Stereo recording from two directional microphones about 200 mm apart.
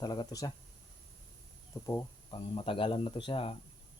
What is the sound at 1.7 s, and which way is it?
Speech, 15° left (ahead or behind).